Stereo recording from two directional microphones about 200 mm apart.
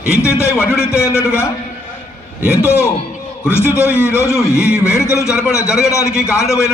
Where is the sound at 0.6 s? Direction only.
5° right (ahead or behind).